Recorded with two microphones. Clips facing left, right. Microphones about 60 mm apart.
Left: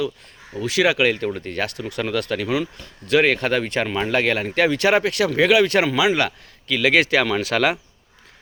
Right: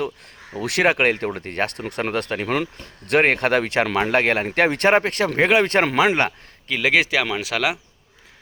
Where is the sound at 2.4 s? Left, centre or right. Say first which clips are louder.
Even; right.